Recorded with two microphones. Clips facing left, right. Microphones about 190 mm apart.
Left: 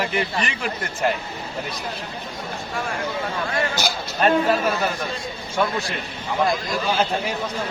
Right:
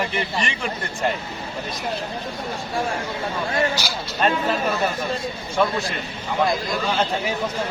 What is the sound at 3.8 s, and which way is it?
Speech, 50° left (ahead or behind).